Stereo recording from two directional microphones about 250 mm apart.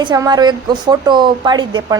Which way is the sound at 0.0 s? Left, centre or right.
Centre.